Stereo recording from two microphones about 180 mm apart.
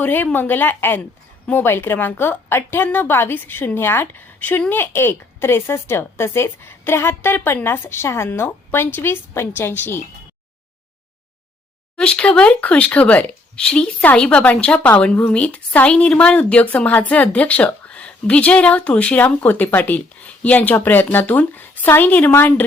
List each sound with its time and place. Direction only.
0.0 s speech: 10° left (ahead or behind)
11.9 s speech: 5° left (ahead or behind)